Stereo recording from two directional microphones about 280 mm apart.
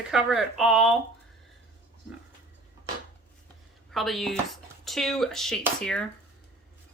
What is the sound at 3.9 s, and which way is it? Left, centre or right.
Speech, centre.